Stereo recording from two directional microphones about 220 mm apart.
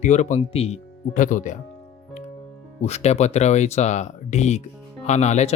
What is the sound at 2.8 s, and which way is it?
Speech, 30° left (ahead or behind).